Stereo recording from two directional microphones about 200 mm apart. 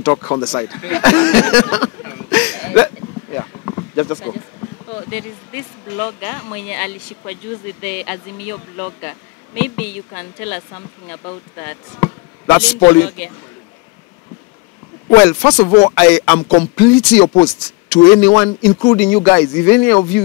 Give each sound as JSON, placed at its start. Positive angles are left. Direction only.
{"t": 0.0, "sound": "speech", "side_deg": 15}
{"t": 3.3, "sound": "a sound", "side_deg": 20}
{"t": 5.1, "sound": "speech", "side_deg": 10}
{"t": 15.0, "sound": "speech", "side_deg": 15}
{"t": 17.2, "sound": "speech", "side_deg": 25}
{"t": 17.8, "sound": "speech", "side_deg": 10}